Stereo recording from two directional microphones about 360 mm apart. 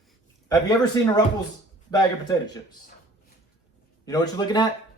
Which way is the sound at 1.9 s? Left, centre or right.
Centre.